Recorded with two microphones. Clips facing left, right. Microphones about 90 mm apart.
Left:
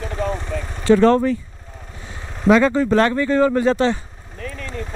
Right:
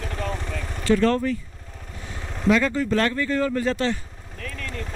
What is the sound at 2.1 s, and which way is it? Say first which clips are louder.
Speech: left 6 dB; 25° left (ahead or behind).